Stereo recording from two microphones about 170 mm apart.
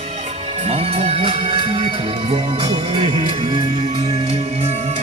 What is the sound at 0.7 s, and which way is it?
Music, 35° right (ahead or behind).